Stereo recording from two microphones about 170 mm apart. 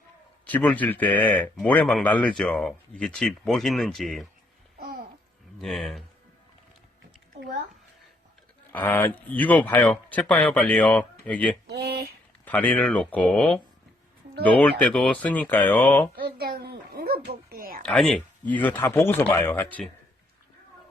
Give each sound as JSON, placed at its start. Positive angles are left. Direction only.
{"t": 0.4, "sound": "a man's voice", "side_deg": 10}
{"t": 4.8, "sound": "babbling", "side_deg": -65}
{"t": 5.5, "sound": "a man's voice", "side_deg": 0}
{"t": 8.7, "sound": "speech", "side_deg": 10}
{"t": 11.7, "sound": "speech", "side_deg": -70}
{"t": 12.5, "sound": "speech", "side_deg": 10}
{"t": 16.1, "sound": "a child's voice", "side_deg": -65}
{"t": 17.8, "sound": "speech", "side_deg": 5}